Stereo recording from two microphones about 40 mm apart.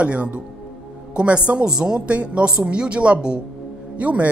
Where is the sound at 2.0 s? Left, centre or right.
Right.